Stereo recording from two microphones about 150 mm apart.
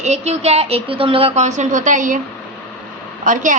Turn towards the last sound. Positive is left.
turn(degrees=-60)  # may be behind; listen again after turning